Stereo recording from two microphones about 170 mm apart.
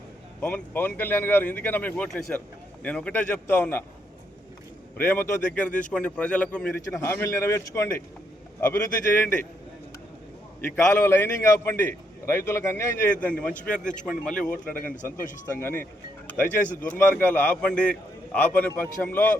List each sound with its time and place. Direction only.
0.3 s speech: 10° left (ahead or behind)
4.9 s speech: 15° left (ahead or behind)
9.1 s speech: 10° left (ahead or behind)
10.7 s speech: 10° left (ahead or behind)
11.9 s a sound: 15° left (ahead or behind)
12.5 s speech: 15° left (ahead or behind)
16.4 s speech: 10° left (ahead or behind)